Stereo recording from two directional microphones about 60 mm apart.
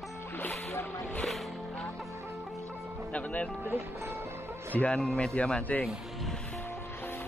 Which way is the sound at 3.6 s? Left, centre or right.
Right.